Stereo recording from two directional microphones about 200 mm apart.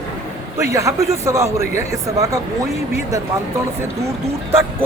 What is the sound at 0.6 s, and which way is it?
Speech, 15° right (ahead or behind).